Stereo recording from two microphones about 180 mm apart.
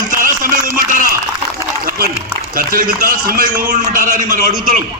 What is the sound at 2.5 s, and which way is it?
A man's voice, 50° right (ahead or behind).